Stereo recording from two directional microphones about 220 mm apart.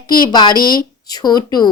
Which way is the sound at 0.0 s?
20° left (ahead or behind).